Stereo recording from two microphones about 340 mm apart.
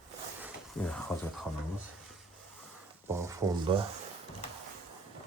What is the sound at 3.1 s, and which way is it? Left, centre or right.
Speech, centre.